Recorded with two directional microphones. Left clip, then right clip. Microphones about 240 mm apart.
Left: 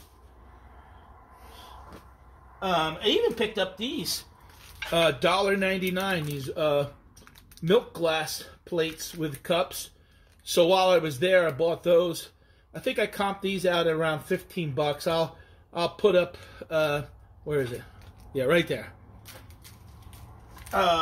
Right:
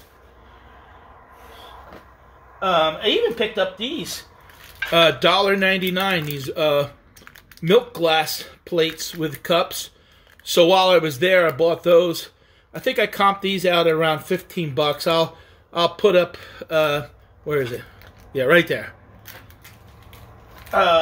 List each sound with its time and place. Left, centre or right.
2.7 s speech: centre
4.9 s speech: centre
8.0 s speech: centre
20.5 s a sound: centre